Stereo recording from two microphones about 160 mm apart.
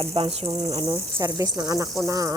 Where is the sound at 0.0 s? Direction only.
40° right (ahead or behind).